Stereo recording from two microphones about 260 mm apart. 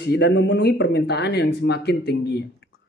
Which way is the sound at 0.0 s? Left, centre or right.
Left.